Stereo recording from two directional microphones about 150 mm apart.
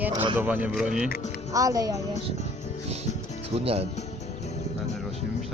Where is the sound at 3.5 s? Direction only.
40° right (ahead or behind).